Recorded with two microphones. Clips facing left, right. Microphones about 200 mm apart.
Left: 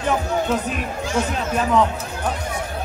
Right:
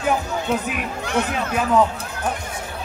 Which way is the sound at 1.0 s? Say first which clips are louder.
Even; 60° right (ahead or behind).